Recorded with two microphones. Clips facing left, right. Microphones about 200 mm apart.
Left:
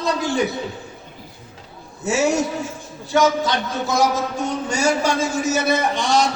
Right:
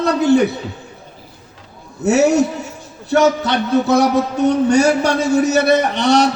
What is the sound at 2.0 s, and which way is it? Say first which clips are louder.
A man's voice: right 6 dB; 65° right (ahead or behind).